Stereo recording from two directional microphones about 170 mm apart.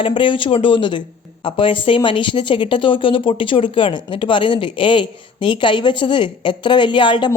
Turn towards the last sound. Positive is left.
turn(degrees=30)  # may be behind; listen again after turning